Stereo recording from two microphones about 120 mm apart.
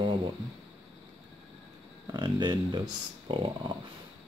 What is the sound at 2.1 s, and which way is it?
Speech, 40° right (ahead or behind).